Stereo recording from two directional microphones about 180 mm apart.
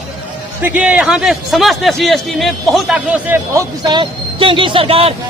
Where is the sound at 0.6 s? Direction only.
10° right (ahead or behind).